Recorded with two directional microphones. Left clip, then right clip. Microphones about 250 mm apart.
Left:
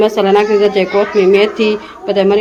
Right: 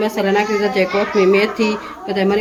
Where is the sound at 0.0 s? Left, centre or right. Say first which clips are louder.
Left 6 dB; centre.